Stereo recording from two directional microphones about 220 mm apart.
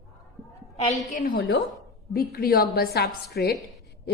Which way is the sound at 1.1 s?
40° left (ahead or behind).